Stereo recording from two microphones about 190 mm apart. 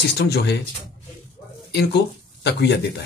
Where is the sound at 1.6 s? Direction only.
65° left (ahead or behind).